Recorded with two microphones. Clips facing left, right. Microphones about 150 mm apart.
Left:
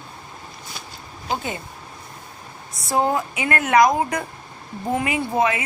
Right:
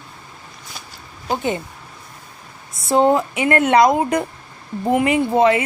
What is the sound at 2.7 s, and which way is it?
A woman's voice, 25° right (ahead or behind).